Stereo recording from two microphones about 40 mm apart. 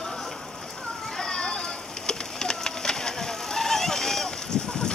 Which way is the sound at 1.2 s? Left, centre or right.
Centre.